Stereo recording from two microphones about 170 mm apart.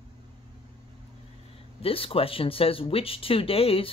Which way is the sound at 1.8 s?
35° left (ahead or behind).